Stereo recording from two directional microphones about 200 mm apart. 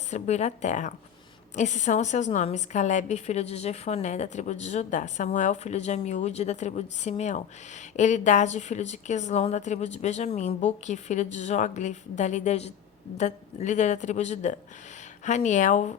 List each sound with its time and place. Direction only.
0.1 s a woman's voice: 35° left (ahead or behind)